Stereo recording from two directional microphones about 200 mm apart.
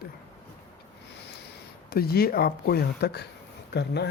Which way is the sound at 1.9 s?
50° left (ahead or behind).